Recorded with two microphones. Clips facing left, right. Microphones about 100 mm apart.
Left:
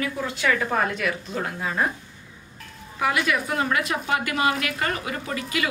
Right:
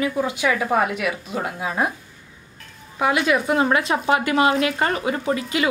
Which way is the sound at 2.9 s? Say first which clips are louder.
Right 4 dB; 25° right (ahead or behind).